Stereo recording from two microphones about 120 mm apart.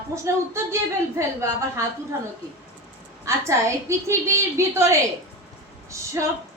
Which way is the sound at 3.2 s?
25° right (ahead or behind).